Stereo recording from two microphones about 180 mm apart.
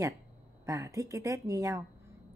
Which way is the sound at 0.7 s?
15° right (ahead or behind).